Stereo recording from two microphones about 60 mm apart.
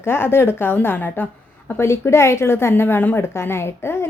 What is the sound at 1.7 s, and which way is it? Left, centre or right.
A woman's voice, left.